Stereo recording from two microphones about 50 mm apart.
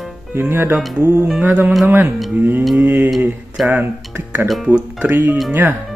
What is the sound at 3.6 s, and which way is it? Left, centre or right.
Speech, right.